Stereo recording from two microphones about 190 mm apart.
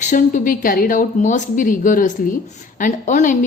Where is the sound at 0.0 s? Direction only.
40° left (ahead or behind).